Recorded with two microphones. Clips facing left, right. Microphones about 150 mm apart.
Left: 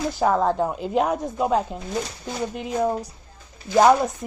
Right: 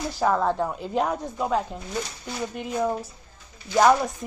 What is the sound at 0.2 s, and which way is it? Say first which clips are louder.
A woman's voice: left 2 dB; 10° left (ahead or behind).